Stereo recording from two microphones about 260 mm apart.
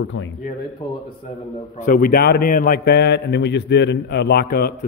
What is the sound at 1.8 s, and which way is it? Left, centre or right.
A man's voice, left.